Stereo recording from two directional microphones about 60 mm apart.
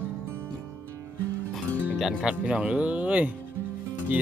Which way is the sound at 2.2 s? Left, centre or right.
Centre.